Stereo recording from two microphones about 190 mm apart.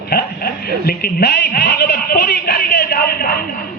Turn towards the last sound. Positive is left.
turn(degrees=55)  # may be behind; listen again after turning